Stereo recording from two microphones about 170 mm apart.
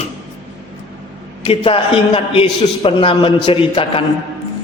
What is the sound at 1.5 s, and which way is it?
A man's voice, 30° left (ahead or behind).